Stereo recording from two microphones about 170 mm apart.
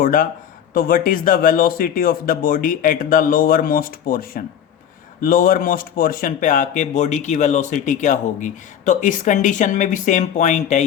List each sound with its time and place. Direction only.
0.0 s speech: 55° left (ahead or behind)